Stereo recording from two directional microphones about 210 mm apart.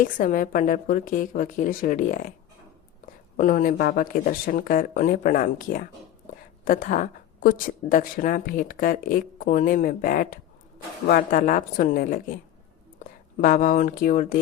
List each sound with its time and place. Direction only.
0.0 s speech: 40° left (ahead or behind)
3.3 s speech: 40° left (ahead or behind)
13.4 s speech: 40° left (ahead or behind)